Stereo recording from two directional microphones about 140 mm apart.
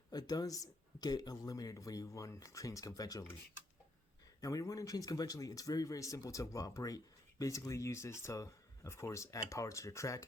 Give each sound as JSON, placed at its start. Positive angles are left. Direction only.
{"t": 0.1, "sound": "speech", "side_deg": 30}
{"t": 4.4, "sound": "speech", "side_deg": 25}